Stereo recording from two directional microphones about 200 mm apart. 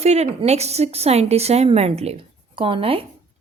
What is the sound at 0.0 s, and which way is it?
A woman's voice, 35° right (ahead or behind).